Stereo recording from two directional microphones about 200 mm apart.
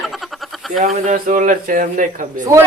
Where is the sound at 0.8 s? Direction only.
40° right (ahead or behind).